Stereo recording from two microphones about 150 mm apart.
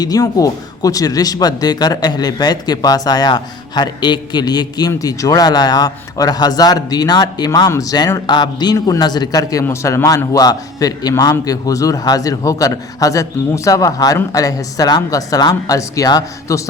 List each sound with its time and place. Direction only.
0.0 s speech: 25° left (ahead or behind)